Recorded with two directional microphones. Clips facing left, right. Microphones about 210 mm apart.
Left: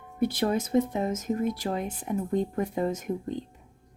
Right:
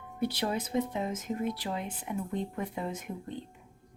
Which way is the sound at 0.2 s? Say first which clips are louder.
Left 6 dB; 50° left (ahead or behind).